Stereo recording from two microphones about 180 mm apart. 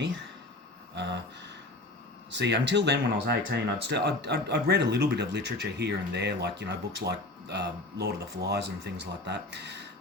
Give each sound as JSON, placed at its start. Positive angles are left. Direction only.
{"t": 0.9, "sound": "speech", "side_deg": -75}